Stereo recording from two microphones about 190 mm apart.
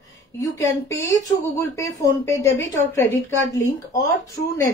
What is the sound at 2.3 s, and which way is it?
A woman's voice, 15° left (ahead or behind).